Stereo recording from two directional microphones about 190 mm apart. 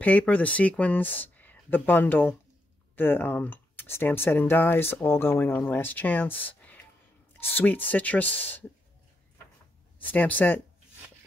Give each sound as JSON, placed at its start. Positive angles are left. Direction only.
{"t": 0.0, "sound": "speech", "side_deg": 10}
{"t": 6.4, "sound": "a sound", "side_deg": 10}
{"t": 7.4, "sound": "speech", "side_deg": 10}
{"t": 10.0, "sound": "speech", "side_deg": 10}